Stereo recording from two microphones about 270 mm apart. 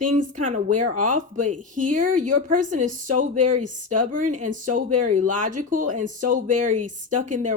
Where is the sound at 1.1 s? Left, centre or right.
Right.